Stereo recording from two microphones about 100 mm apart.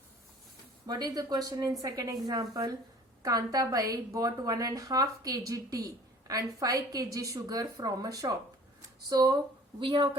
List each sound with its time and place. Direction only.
0.9 s a woman's voice: 40° right (ahead or behind)
9.8 s speech: 55° right (ahead or behind)